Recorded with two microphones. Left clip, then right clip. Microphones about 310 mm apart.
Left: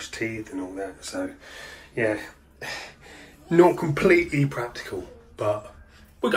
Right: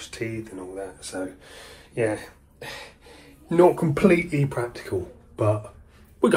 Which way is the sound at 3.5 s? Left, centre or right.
Centre.